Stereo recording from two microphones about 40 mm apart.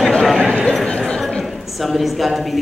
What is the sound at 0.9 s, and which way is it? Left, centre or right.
Speech, left.